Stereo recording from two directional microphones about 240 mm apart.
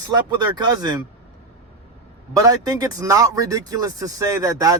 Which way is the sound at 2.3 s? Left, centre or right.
Centre.